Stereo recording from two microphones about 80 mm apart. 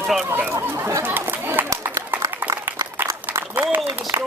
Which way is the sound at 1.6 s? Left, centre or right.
Right.